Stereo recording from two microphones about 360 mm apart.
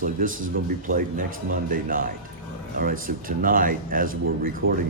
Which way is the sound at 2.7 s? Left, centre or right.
Right.